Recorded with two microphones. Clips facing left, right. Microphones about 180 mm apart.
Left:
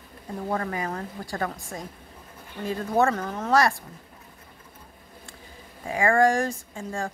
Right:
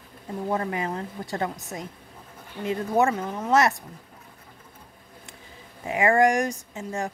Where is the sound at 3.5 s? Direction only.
20° right (ahead or behind).